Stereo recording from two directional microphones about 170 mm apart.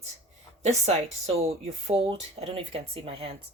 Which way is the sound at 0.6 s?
40° right (ahead or behind).